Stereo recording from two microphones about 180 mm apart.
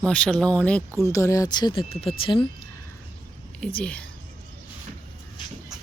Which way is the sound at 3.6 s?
5° left (ahead or behind).